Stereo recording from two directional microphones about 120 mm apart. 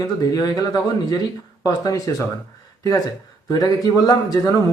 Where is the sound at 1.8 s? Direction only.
30° left (ahead or behind).